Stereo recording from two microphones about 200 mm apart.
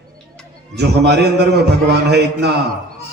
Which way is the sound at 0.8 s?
55° right (ahead or behind).